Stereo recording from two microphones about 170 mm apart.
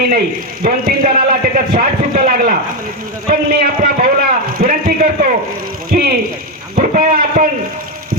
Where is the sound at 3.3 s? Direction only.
60° right (ahead or behind).